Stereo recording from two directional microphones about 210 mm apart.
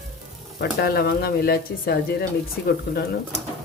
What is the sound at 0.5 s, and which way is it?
Speech, 50° left (ahead or behind).